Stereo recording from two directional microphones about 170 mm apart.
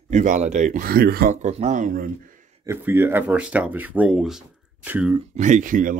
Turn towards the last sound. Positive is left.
turn(degrees=-50)  # may be behind; listen again after turning